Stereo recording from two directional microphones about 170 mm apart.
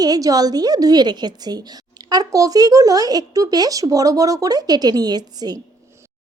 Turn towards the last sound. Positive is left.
turn(degrees=-25)  # may be behind; listen again after turning